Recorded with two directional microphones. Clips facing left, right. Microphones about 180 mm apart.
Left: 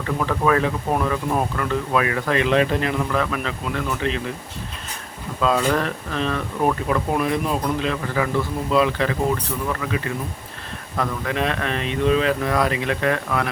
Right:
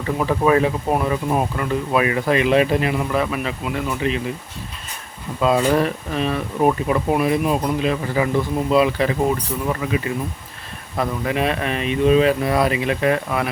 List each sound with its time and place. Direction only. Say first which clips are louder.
0.2 s speech: right 3 dB; 20° right (ahead or behind)
5.4 s speech: right 3 dB; 15° right (ahead or behind)